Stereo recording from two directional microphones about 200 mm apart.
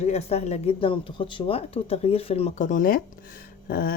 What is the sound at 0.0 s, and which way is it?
Speech, 30° left (ahead or behind).